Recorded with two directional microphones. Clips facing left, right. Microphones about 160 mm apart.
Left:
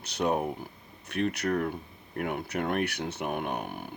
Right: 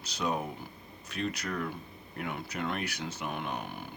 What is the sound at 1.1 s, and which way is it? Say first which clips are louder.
Speech: left 6 dB; 60° left (ahead or behind).